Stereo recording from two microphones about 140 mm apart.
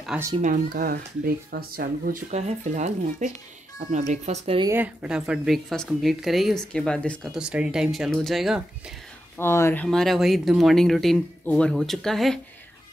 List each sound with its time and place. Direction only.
0.4 s speech: 85° right
2.3 s speech: 55° right (ahead or behind)
4.7 s speech: 10° right (ahead or behind)
7.3 s speech: 5° right (ahead or behind)
9.4 s speech: 15° left (ahead or behind)
9.8 s speech: centre (ahead or behind)